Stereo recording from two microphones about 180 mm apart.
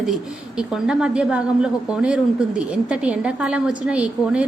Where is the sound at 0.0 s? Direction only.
Centre (ahead or behind).